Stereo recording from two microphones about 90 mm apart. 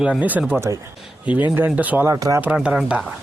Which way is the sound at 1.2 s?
15° right (ahead or behind).